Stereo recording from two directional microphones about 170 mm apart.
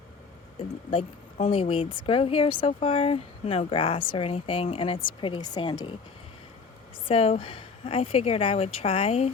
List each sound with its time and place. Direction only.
0.9 s speech: 35° left (ahead or behind)
7.1 s speech: 35° left (ahead or behind)